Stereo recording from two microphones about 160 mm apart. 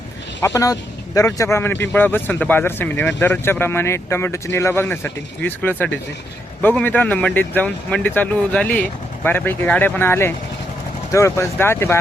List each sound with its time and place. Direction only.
0.4 s speech: 20° left (ahead or behind)